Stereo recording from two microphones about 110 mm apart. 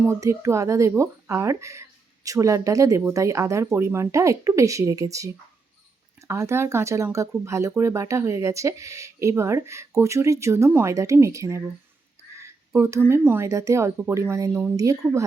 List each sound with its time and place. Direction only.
0.0 s a woman's voice: 25° right (ahead or behind)